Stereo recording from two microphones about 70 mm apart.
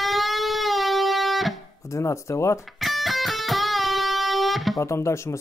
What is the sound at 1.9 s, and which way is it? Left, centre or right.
Speech, left.